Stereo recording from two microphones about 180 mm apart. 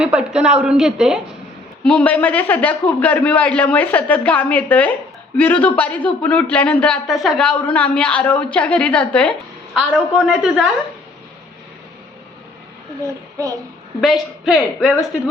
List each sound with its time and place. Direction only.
0.0 s speech: 5° right (ahead or behind)
1.8 s a man's voice: 10° left (ahead or behind)
13.1 s child singing: 20° right (ahead or behind)
14.0 s speech: centre (ahead or behind)